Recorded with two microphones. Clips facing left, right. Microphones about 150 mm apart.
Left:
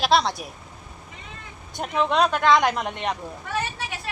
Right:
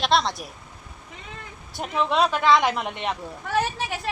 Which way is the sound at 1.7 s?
Centre (ahead or behind).